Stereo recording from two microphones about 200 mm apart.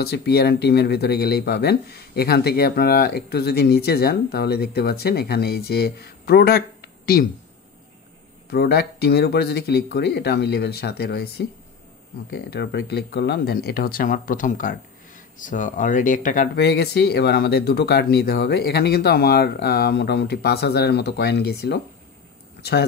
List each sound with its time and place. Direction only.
0.0 s speech: 55° left (ahead or behind)
8.5 s speech: 55° left (ahead or behind)